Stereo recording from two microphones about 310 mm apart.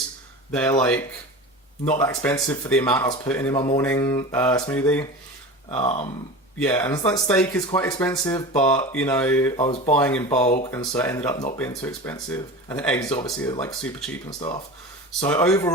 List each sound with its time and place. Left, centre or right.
0.5 s speech: centre
5.7 s speech: centre
7.3 s speech: centre
9.6 s speech: centre
10.7 s speech: centre
14.3 s speech: centre